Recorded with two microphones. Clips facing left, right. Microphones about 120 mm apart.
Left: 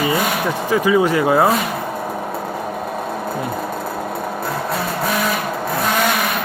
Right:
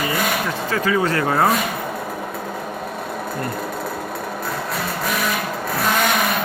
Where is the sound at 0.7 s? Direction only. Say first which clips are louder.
Left 5 dB; 15° left (ahead or behind).